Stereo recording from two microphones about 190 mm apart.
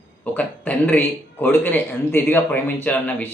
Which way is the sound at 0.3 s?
10° left (ahead or behind).